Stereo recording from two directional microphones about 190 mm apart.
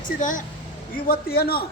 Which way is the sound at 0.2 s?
40° left (ahead or behind).